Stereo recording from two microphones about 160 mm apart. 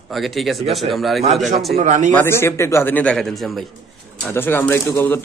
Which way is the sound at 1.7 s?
50° right (ahead or behind).